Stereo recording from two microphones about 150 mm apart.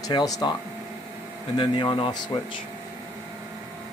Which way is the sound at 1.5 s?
35° left (ahead or behind).